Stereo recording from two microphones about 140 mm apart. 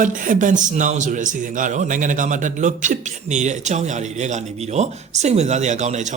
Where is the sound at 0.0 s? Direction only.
65° right (ahead or behind).